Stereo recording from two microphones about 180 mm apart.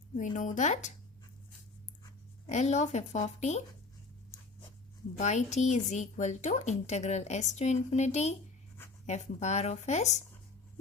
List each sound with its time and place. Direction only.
0.3 s a woman's voice: 40° left (ahead or behind)
2.5 s a woman's voice: 40° left (ahead or behind)
5.1 s a woman's voice: 40° left (ahead or behind)